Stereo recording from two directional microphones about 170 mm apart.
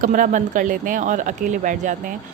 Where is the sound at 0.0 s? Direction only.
50° right (ahead or behind).